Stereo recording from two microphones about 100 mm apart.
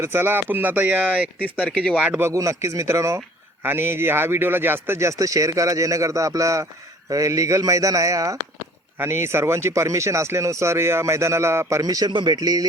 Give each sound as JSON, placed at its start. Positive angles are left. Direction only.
{"t": 0.0, "sound": "speech", "side_deg": -20}
{"t": 1.6, "sound": "speech", "side_deg": 10}
{"t": 2.0, "sound": "speech", "side_deg": -15}
{"t": 2.2, "sound": "a man's voice", "side_deg": -30}